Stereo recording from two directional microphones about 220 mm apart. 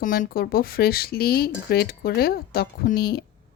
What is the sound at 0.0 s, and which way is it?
A woman's voice, 40° left (ahead or behind).